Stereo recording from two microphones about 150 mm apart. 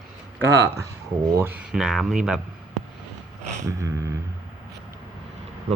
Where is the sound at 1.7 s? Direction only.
Centre (ahead or behind).